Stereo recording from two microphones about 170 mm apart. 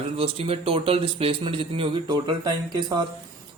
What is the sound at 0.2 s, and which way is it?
Speech, 35° right (ahead or behind).